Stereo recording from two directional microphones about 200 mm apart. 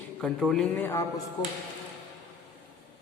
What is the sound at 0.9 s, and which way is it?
Speech, 15° left (ahead or behind).